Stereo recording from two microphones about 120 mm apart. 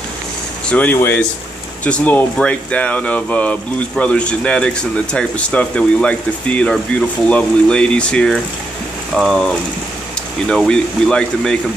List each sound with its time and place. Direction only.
0.7 s speech: 10° left (ahead or behind)